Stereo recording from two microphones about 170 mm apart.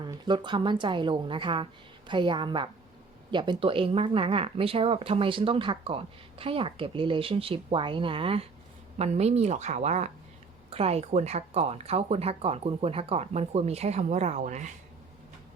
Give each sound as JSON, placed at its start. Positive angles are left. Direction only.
{"t": 0.1, "sound": "a woman's voice", "side_deg": -25}